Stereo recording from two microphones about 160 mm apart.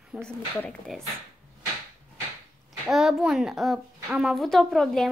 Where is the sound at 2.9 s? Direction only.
5° right (ahead or behind).